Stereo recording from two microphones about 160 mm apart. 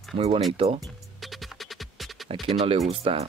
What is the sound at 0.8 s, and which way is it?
Music, centre (ahead or behind).